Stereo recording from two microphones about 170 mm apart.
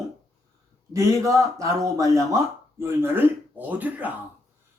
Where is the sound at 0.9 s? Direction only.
20° right (ahead or behind).